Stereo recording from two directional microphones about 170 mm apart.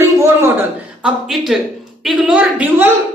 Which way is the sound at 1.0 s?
Centre (ahead or behind).